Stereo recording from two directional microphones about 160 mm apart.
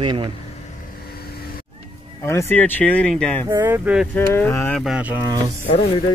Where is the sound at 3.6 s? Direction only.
10° right (ahead or behind).